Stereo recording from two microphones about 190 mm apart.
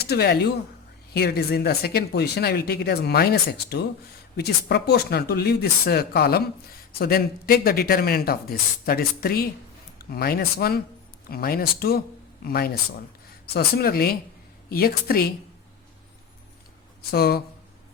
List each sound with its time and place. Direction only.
0.0 s speech: 55° left (ahead or behind)
17.1 s speech: 55° left (ahead or behind)